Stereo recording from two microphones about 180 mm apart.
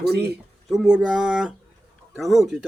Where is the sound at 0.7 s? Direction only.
5° right (ahead or behind).